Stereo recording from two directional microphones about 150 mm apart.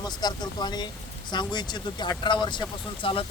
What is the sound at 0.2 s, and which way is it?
Speech, 25° left (ahead or behind).